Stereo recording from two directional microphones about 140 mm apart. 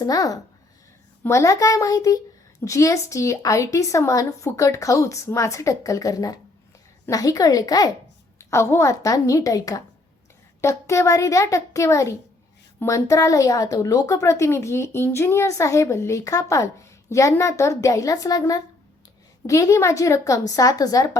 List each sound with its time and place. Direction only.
0.0 s a woman's voice: 25° left (ahead or behind)